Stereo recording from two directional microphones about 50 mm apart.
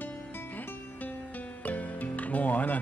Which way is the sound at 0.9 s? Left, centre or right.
Left.